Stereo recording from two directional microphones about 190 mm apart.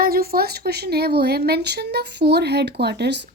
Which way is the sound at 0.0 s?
55° right (ahead or behind).